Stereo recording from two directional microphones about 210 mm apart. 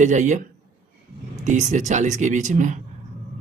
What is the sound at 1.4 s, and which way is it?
Speech, 35° right (ahead or behind).